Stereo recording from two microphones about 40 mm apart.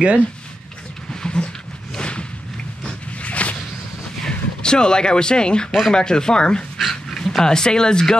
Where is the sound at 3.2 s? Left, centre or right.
Left.